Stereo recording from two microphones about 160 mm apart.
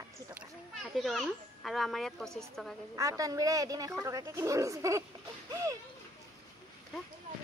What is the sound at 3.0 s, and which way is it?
Speech, 20° right (ahead or behind).